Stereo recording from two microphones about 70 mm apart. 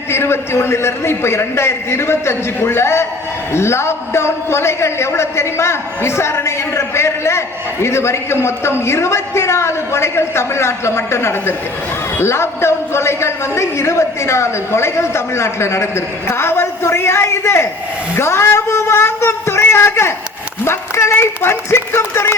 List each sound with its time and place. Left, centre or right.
0.1 s a man's voice: left